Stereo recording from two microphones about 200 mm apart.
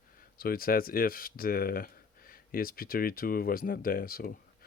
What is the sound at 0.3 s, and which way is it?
Speech, 45° left (ahead or behind).